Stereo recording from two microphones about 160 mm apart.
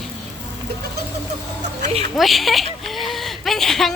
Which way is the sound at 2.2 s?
Centre (ahead or behind).